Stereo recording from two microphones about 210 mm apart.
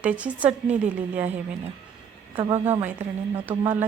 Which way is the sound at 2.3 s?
25° right (ahead or behind).